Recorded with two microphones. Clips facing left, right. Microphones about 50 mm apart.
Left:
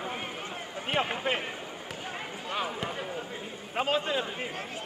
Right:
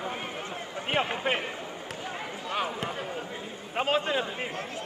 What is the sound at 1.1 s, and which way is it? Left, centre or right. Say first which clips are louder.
Speech: right 2 dB; right.